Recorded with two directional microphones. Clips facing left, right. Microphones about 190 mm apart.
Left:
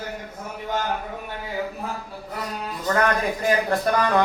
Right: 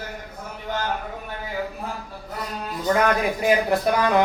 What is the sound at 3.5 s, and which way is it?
Speech, 10° right (ahead or behind).